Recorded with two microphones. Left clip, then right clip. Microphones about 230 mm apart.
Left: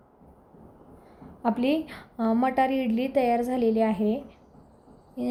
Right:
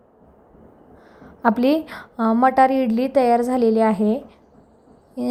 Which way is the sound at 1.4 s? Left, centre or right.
Centre.